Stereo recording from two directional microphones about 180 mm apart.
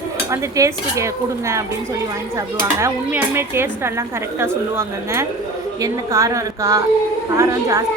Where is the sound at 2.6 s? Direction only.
15° right (ahead or behind).